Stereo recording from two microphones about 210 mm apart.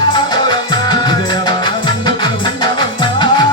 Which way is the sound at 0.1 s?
20° left (ahead or behind).